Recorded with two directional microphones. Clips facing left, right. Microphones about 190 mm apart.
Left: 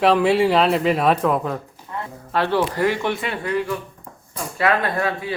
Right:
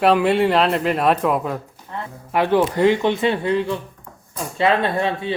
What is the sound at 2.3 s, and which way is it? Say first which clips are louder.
Speech: right 3 dB; 15° right (ahead or behind).